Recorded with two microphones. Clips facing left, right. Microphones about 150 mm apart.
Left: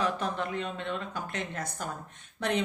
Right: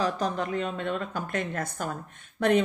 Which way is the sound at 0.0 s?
40° right (ahead or behind).